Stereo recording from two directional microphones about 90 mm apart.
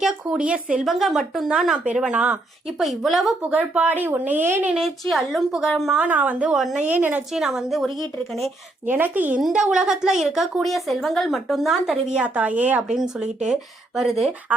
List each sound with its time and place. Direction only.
0.0 s a woman's voice: 5° right (ahead or behind)
2.8 s speech: centre (ahead or behind)
3.4 s a woman's voice: 15° right (ahead or behind)
5.0 s speech: centre (ahead or behind)
6.0 s a woman's voice: 15° right (ahead or behind)
6.5 s speech: 5° right (ahead or behind)
6.8 s a woman's voice: 20° right (ahead or behind)
7.3 s speech: 5° right (ahead or behind)
8.9 s a woman's voice: 20° right (ahead or behind)
9.4 s a woman's voice: 10° right (ahead or behind)
12.9 s speech: 5° right (ahead or behind)